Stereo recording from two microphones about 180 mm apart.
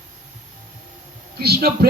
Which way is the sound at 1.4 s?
60° right (ahead or behind).